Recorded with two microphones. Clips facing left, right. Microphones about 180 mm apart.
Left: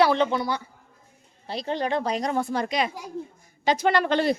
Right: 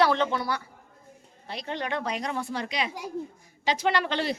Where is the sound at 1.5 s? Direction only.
35° left (ahead or behind); by 4.4 s 50° left (ahead or behind).